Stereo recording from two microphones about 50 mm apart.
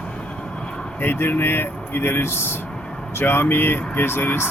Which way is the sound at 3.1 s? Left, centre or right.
Left.